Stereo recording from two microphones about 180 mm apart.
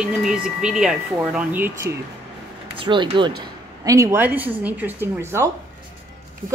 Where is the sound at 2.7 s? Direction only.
25° right (ahead or behind).